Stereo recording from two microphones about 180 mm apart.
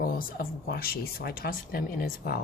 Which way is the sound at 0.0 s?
55° left (ahead or behind).